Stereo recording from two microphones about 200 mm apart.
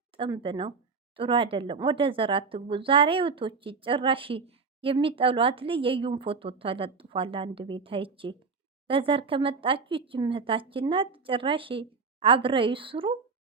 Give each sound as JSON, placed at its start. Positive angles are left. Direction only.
{"t": 0.2, "sound": "speech", "side_deg": -25}